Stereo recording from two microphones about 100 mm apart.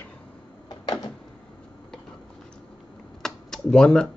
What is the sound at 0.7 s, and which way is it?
Door, 45° left (ahead or behind).